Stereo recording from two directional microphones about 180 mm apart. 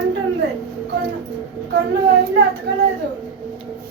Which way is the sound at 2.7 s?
70° right (ahead or behind).